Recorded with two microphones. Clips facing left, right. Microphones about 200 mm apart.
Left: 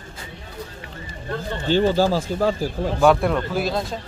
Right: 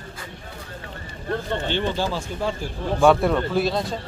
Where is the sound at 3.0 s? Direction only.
Centre (ahead or behind).